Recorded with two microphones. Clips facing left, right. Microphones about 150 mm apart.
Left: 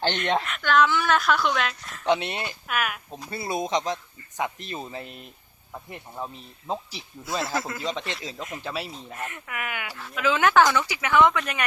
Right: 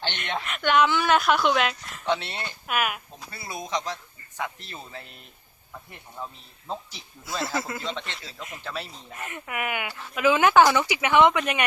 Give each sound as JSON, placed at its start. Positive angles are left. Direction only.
{"t": 0.0, "sound": "speech", "side_deg": 40}
{"t": 0.6, "sound": "speech", "side_deg": -15}
{"t": 2.0, "sound": "speech", "side_deg": 15}
{"t": 2.6, "sound": "speech", "side_deg": -10}
{"t": 3.2, "sound": "speech", "side_deg": 25}
{"t": 7.3, "sound": "a man's voice", "side_deg": 0}
{"t": 9.3, "sound": "speech", "side_deg": -15}